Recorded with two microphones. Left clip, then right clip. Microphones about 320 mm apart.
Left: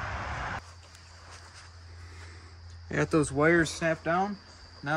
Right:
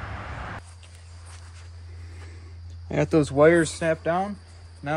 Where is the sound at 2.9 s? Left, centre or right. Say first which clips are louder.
Right 5 dB; centre.